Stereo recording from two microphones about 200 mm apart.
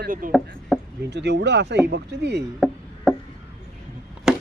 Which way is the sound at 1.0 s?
55° right (ahead or behind).